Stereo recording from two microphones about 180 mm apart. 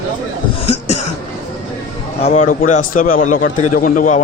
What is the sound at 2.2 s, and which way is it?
A man's voice, 40° left (ahead or behind).